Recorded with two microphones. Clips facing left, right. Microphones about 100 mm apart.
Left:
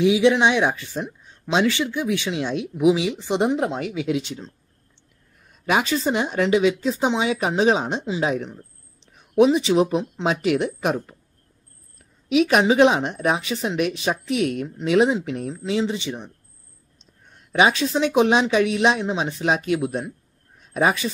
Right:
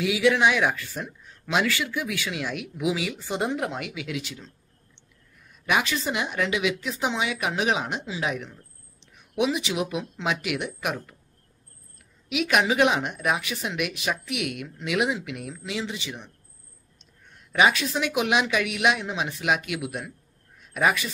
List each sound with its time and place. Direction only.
0.0 s speech: 25° left (ahead or behind)
5.5 s speech: 35° left (ahead or behind)
12.3 s a woman's voice: 35° left (ahead or behind)